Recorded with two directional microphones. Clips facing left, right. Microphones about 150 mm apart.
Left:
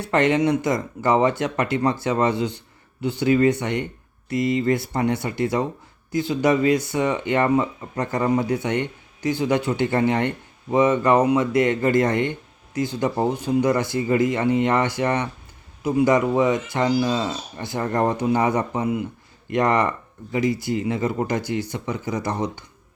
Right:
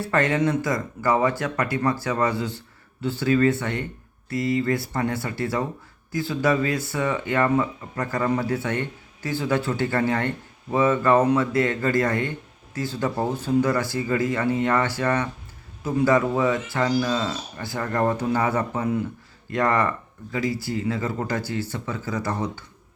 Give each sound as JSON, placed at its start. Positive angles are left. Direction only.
{"t": 0.0, "sound": "speech", "side_deg": 20}